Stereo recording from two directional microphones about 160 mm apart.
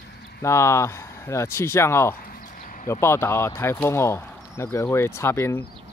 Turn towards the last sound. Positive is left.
turn(degrees=15)  # may be behind; listen again after turning